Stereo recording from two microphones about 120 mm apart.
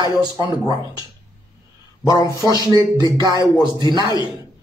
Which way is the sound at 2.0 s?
30° left (ahead or behind).